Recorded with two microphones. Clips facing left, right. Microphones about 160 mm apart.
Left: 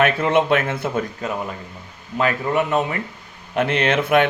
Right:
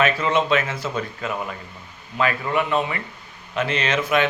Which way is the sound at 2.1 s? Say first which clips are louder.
Left 2 dB; 40° left (ahead or behind).